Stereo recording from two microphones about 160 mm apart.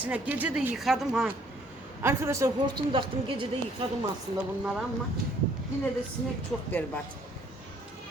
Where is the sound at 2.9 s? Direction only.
35° right (ahead or behind).